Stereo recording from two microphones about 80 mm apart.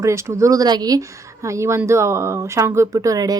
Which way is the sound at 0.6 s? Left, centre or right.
Right.